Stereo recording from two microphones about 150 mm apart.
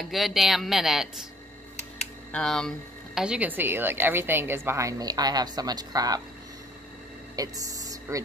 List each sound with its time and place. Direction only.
0.0 s speech: centre (ahead or behind)
2.3 s speech: 5° left (ahead or behind)
3.2 s a woman's voice: 10° right (ahead or behind); by 6.2 s 25° right (ahead or behind)
7.3 s a sound: 25° right (ahead or behind)